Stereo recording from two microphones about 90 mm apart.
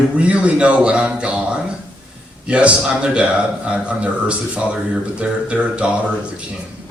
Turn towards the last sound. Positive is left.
turn(degrees=-10)  # may be behind; listen again after turning